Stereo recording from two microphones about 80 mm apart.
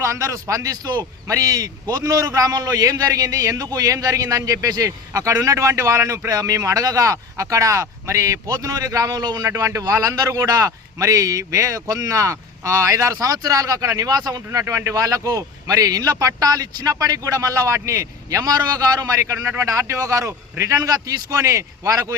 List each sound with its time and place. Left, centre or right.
0.0 s a man's voice: right
1.3 s a man's voice: right
9.5 s a man's voice: right
19.5 s a man's voice: right